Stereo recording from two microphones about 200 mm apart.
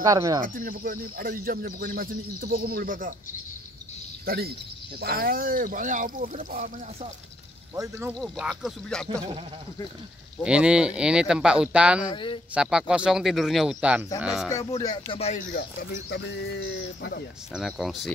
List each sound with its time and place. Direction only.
0.0 s speech: 15° right (ahead or behind)
0.4 s speech: 45° right (ahead or behind)
4.3 s speech: 50° right (ahead or behind)
7.7 s speech: 15° right (ahead or behind)
8.1 s speech: centre (ahead or behind)
10.4 s speech: 5° right (ahead or behind)
12.1 s speech: 25° left (ahead or behind)
12.5 s speech: 5° right (ahead or behind)
14.8 s speech: 25° left (ahead or behind); by 17.2 s 60° left (ahead or behind)
17.6 s speech: centre (ahead or behind)